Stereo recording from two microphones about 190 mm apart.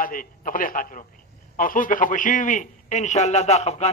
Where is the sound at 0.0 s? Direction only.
45° left (ahead or behind).